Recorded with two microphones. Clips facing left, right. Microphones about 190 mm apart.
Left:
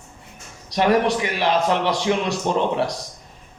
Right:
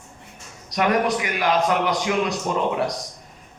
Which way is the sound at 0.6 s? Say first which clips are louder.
Left 3 dB; 30° left (ahead or behind).